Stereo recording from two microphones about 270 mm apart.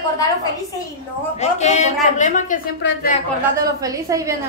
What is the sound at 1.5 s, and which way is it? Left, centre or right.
A woman's voice, left.